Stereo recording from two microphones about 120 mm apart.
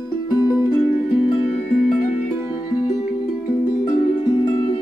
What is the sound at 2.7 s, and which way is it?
Music, 55° left (ahead or behind).